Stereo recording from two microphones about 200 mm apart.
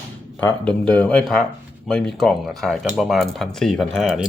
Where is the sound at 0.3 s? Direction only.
10° left (ahead or behind).